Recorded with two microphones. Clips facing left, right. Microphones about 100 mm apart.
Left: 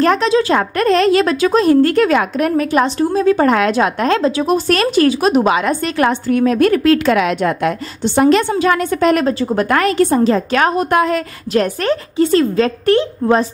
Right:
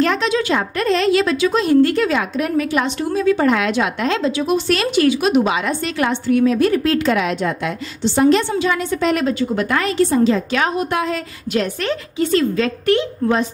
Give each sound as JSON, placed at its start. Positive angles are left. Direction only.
{"t": 0.0, "sound": "a woman's voice", "side_deg": 40}
{"t": 0.6, "sound": "a woman's voice", "side_deg": 50}
{"t": 9.3, "sound": "a woman's voice", "side_deg": 35}
{"t": 9.7, "sound": "a woman's voice", "side_deg": 55}
{"t": 11.5, "sound": "a woman's voice", "side_deg": 40}